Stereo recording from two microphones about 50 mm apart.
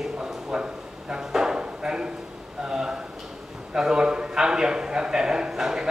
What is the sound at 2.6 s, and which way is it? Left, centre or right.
A man's voice, centre.